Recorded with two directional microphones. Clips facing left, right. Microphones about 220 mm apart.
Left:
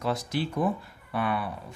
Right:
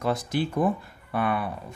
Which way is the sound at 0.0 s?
50° right (ahead or behind).